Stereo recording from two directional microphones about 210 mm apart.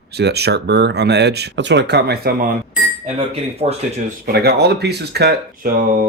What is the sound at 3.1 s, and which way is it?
Speech, 30° right (ahead or behind).